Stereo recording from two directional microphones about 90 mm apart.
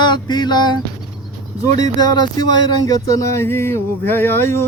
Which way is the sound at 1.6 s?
40° left (ahead or behind).